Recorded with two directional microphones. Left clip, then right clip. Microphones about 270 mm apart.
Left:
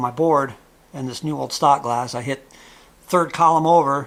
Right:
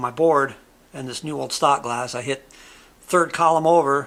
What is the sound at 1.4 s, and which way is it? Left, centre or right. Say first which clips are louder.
Speech: left 3 dB; right.